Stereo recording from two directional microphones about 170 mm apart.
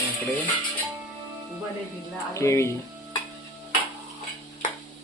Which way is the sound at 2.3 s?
15° left (ahead or behind).